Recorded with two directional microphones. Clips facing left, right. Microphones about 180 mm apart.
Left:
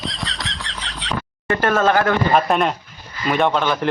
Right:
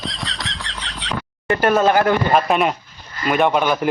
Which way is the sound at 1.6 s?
15° right (ahead or behind).